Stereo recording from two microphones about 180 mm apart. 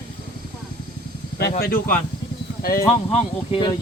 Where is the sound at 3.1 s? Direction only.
25° left (ahead or behind).